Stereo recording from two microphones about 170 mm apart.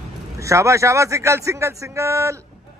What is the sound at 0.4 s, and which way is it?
Speech, 15° right (ahead or behind).